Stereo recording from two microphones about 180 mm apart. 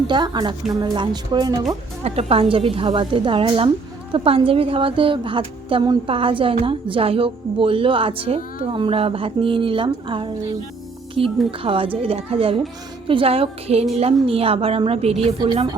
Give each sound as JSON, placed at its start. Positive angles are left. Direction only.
{"t": 0.1, "sound": "a woman's voice", "side_deg": -25}
{"t": 2.0, "sound": "a woman's voice", "side_deg": -35}
{"t": 11.6, "sound": "a woman's voice", "side_deg": -30}